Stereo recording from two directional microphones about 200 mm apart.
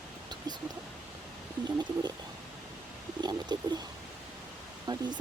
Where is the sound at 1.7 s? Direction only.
20° right (ahead or behind).